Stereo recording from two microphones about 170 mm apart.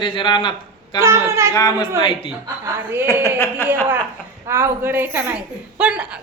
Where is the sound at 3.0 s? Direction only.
20° left (ahead or behind).